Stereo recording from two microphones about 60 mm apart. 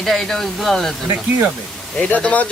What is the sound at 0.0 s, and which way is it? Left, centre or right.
Speech, centre.